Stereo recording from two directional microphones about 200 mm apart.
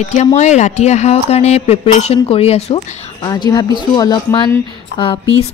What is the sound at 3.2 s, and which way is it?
Speech, 20° left (ahead or behind).